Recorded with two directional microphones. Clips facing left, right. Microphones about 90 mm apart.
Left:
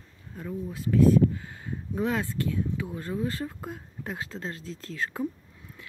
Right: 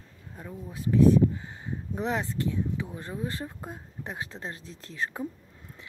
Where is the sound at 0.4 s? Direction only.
20° right (ahead or behind).